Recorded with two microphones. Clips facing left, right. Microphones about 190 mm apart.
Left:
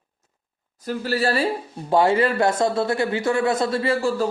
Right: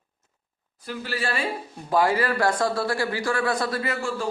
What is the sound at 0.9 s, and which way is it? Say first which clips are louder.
Speech: left 7 dB; 40° left (ahead or behind).